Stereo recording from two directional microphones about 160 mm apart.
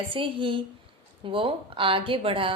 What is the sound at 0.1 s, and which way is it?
A woman's voice, 30° right (ahead or behind).